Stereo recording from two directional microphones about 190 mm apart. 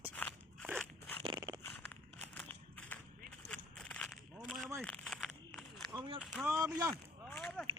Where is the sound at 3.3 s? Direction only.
5° left (ahead or behind).